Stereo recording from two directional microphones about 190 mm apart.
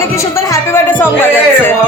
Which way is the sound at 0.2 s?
15° left (ahead or behind).